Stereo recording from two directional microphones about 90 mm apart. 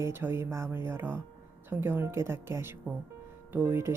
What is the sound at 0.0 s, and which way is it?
Speech, 25° right (ahead or behind).